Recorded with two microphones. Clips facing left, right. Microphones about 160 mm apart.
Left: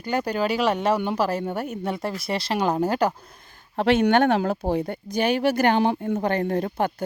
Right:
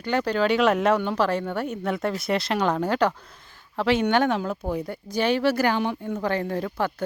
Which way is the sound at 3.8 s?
55° left (ahead or behind).